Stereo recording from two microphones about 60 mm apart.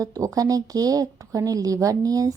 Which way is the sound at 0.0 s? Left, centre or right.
Right.